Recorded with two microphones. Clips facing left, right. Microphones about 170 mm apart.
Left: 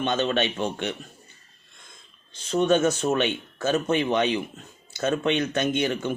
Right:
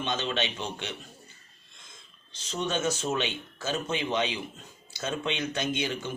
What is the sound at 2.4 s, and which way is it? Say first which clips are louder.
Speech: left 9 dB; 55° left (ahead or behind).